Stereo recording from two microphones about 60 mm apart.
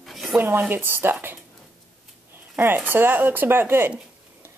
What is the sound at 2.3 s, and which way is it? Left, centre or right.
Speech, right.